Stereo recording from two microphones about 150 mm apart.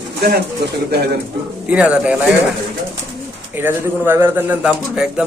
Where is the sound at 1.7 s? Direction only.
10° right (ahead or behind).